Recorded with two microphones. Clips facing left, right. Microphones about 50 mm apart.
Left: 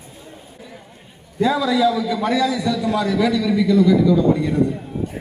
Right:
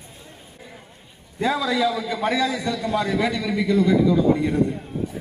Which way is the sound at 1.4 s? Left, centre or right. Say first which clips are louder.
Left 4 dB; right.